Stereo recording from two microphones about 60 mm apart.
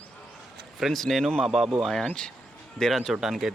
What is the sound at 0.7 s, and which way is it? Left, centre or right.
Speech, centre.